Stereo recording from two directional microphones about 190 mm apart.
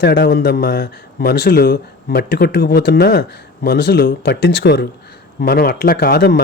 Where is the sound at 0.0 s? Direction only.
60° left (ahead or behind).